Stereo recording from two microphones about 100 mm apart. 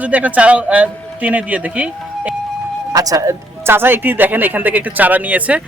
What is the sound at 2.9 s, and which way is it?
A man's voice, 35° right (ahead or behind).